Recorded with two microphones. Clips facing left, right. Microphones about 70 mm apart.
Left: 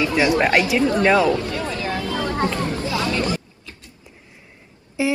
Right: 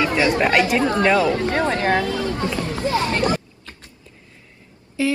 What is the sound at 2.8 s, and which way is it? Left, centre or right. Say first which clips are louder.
Music: right 6 dB; right.